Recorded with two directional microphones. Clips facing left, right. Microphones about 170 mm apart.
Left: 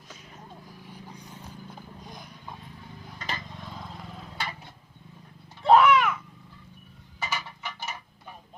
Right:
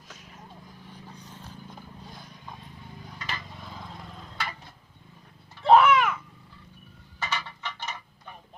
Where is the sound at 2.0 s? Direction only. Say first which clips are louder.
Left 2 dB; 15° left (ahead or behind).